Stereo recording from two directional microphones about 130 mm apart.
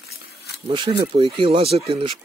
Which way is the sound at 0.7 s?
45° right (ahead or behind).